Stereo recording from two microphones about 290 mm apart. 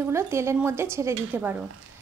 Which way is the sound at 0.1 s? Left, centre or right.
Centre.